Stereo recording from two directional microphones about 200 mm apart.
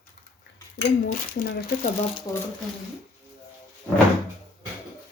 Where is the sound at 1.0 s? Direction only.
40° left (ahead or behind).